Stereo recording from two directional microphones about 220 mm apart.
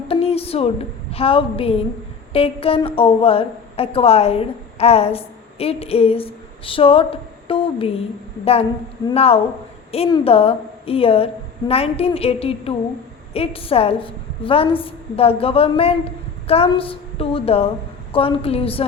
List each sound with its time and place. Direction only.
0.1 s a woman's voice: 25° left (ahead or behind)
7.4 s a sound: 25° left (ahead or behind)
9.0 s a woman's voice: 25° left (ahead or behind)